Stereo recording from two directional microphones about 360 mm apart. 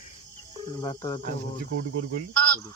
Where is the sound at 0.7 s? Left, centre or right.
Centre.